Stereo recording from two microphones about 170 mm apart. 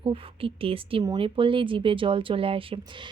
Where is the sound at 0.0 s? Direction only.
30° right (ahead or behind).